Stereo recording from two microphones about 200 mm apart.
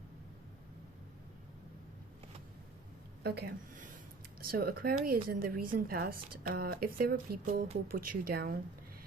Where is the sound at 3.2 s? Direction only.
55° right (ahead or behind).